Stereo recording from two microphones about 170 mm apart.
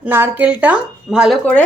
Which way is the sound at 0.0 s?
10° right (ahead or behind).